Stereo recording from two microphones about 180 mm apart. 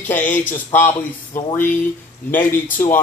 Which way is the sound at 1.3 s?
50° left (ahead or behind).